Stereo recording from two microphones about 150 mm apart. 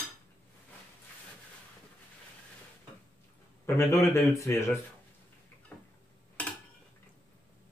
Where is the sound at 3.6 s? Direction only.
20° left (ahead or behind).